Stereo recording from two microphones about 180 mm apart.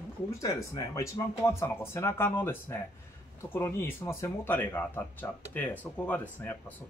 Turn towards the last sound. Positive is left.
turn(degrees=10)  # may be behind; listen again after turning